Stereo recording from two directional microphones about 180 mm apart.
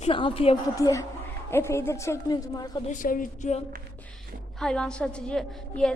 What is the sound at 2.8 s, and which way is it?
Speech, 45° left (ahead or behind).